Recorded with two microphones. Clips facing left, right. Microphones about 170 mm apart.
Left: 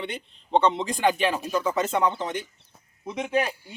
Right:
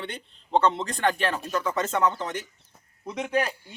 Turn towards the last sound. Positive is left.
turn(degrees=20)  # may be behind; listen again after turning